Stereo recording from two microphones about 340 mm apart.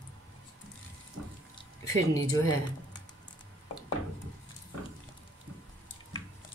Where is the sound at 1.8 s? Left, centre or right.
Centre.